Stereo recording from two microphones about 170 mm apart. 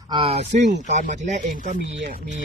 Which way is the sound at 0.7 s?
45° right (ahead or behind).